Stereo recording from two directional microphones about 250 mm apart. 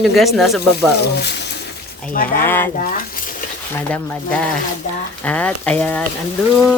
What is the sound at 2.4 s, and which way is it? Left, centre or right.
Speech, centre.